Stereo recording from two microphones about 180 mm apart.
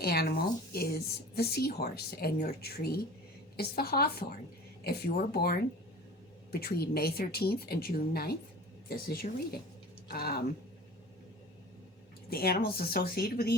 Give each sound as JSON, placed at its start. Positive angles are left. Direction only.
{"t": 0.0, "sound": "speech", "side_deg": 60}
{"t": 12.3, "sound": "speech", "side_deg": 55}